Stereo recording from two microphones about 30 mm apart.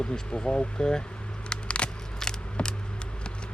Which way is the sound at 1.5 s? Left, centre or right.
Left.